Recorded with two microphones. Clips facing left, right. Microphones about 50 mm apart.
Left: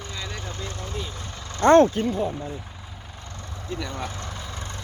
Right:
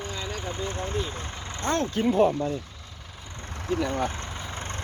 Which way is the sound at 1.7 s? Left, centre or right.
Left.